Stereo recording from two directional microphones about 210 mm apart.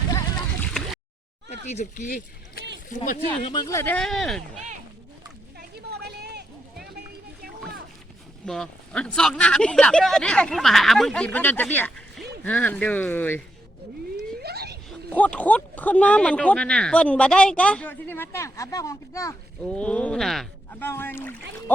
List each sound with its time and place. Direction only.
1.6 s speech: 35° left (ahead or behind)
3.5 s speech: 15° left (ahead or behind)
5.5 s a sound: 50° right (ahead or behind)
8.4 s speech: 5° left (ahead or behind)
14.4 s a sound: 50° right (ahead or behind)
14.8 s speech: 5° left (ahead or behind)